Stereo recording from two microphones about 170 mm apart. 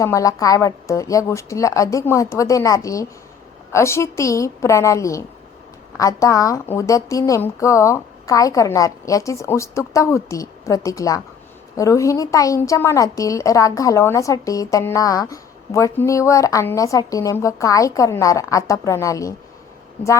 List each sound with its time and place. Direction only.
0.0 s a woman's voice: 20° left (ahead or behind)